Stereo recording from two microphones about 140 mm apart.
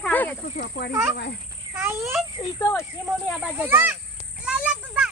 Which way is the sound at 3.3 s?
10° right (ahead or behind).